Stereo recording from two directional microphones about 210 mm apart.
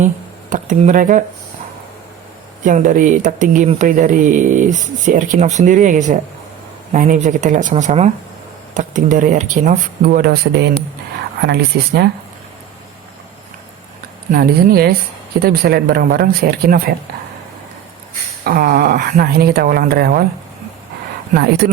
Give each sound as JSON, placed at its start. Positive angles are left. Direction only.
{"t": 0.5, "sound": "speech", "side_deg": -35}
{"t": 2.6, "sound": "speech", "side_deg": -40}
{"t": 14.3, "sound": "speech", "side_deg": -45}
{"t": 18.4, "sound": "speech", "side_deg": -45}
{"t": 21.3, "sound": "speech", "side_deg": -45}